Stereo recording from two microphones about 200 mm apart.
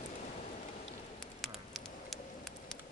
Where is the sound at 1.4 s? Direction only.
Centre (ahead or behind).